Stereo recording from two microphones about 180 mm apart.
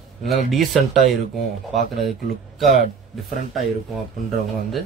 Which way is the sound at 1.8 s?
60° right (ahead or behind).